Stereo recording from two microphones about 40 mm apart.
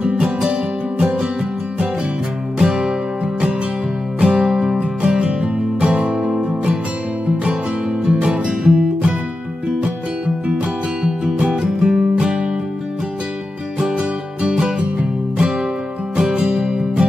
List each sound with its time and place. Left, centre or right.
0.5 s music: right
2.6 s music: centre
4.5 s music: centre
8.0 s music: right
11.0 s music: centre
11.3 s music: right
11.6 s music: centre
13.7 s music: right